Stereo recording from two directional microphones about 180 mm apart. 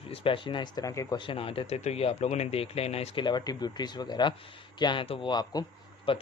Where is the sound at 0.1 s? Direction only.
30° left (ahead or behind).